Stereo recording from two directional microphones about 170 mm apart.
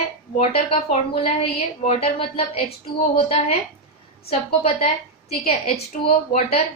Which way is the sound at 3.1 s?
35° left (ahead or behind).